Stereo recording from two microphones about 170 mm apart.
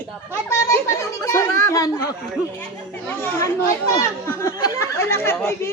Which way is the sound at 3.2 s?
15° left (ahead or behind).